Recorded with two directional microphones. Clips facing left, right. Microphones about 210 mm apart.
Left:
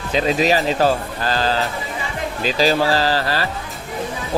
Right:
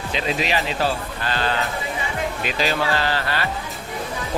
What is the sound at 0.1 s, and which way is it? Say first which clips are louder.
Speech: left 7 dB; 40° left (ahead or behind).